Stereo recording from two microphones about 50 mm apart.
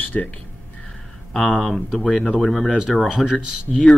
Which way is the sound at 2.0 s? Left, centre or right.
Centre.